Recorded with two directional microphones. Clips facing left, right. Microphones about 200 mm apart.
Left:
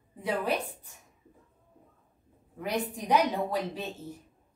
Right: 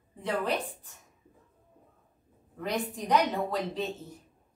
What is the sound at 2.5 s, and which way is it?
A woman's voice, 10° left (ahead or behind).